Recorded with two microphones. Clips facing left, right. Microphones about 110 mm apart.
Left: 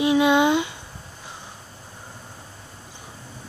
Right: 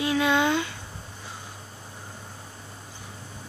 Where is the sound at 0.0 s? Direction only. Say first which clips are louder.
Left 5 dB; 20° left (ahead or behind).